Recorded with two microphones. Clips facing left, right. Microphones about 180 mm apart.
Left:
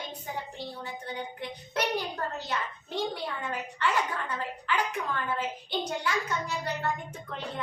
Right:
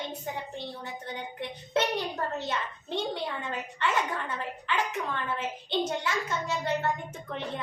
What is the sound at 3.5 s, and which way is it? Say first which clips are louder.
A woman's voice: left 1 dB; 20° right (ahead or behind).